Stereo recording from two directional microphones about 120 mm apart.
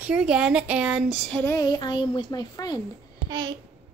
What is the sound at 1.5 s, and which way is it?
A child's voice, 35° left (ahead or behind).